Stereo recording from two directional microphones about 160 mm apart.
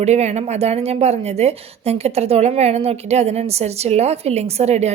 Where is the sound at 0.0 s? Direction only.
45° right (ahead or behind).